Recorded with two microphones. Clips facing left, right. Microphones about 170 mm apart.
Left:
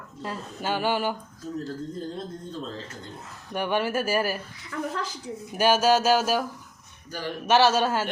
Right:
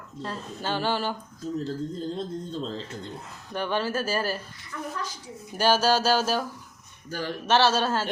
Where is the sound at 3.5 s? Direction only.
15° left (ahead or behind).